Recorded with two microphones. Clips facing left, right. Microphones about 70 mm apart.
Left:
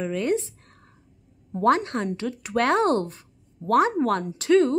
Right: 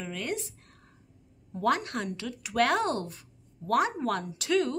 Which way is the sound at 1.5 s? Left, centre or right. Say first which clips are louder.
Left 7 dB; left.